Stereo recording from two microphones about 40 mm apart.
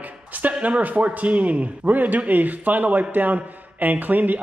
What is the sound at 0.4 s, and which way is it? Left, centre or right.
A man's voice, right.